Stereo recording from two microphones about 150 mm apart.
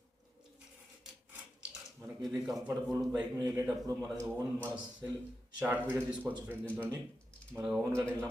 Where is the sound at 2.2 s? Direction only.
Centre (ahead or behind).